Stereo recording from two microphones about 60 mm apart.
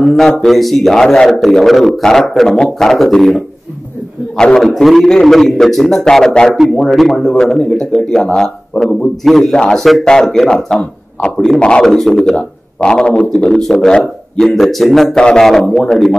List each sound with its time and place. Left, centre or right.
0.0 s a man's voice: centre
4.6 s a man's voice: centre
10.5 s speech: centre
11.3 s a man's voice: centre
15.1 s a man's voice: centre